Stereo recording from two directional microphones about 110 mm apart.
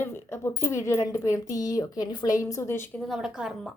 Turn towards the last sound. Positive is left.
turn(degrees=-5)  # may be behind; listen again after turning